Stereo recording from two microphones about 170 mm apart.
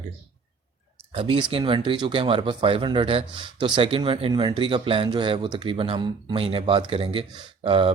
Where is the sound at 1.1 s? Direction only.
30° right (ahead or behind).